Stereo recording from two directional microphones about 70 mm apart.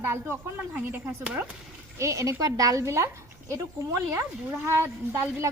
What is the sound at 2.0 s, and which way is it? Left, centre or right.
Speech, right.